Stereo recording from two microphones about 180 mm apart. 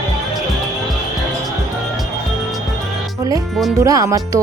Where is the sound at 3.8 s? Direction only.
20° right (ahead or behind).